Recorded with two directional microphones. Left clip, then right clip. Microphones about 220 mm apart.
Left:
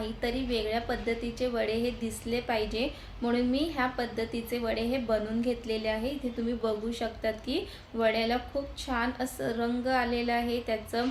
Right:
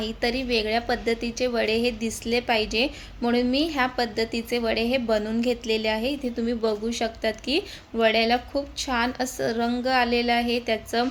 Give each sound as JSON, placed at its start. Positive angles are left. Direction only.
{"t": 0.0, "sound": "a woman's voice", "side_deg": -40}